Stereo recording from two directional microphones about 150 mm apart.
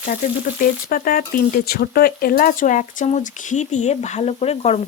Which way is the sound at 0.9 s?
70° left (ahead or behind).